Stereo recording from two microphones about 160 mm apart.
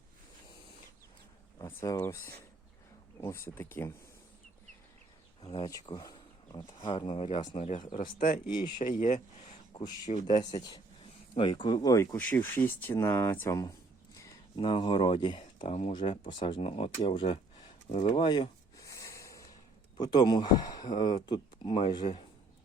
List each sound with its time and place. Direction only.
1.6 s speech: 20° left (ahead or behind)
5.4 s speech: 30° left (ahead or behind)
7.9 s speech: 60° left (ahead or behind)
10.3 s speech: 25° left (ahead or behind)
12.1 s speech: 10° left (ahead or behind)
14.5 s speech: 35° left (ahead or behind)
16.0 s speech: 30° left (ahead or behind)
18.1 s a sound: 30° left (ahead or behind)
20.0 s speech: 25° left (ahead or behind)